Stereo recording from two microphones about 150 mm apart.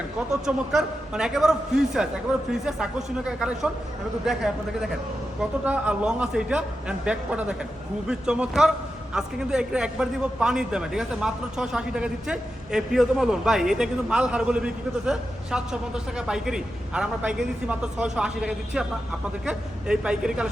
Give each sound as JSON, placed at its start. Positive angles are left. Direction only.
{"t": 0.3, "sound": "a man's voice", "side_deg": -5}